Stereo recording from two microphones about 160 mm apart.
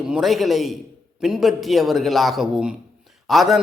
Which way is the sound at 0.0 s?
5° right (ahead or behind).